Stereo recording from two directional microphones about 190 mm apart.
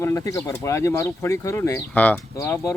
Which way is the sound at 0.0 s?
15° left (ahead or behind).